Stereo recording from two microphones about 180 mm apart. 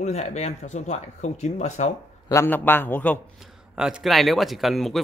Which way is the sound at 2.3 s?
15° left (ahead or behind).